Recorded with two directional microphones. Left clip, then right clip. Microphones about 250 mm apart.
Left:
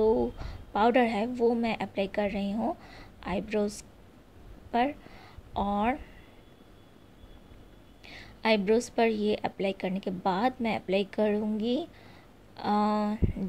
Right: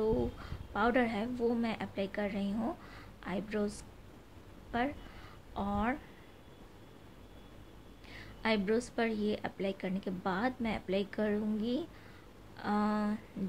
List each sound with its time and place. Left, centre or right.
0.0 s a woman's voice: centre
8.1 s a woman's voice: centre